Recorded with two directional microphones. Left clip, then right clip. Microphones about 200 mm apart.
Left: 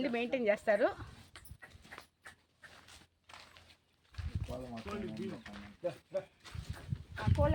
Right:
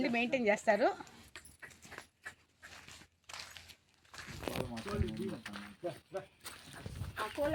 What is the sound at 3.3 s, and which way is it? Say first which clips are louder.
Creak: right 6 dB; 55° right (ahead or behind).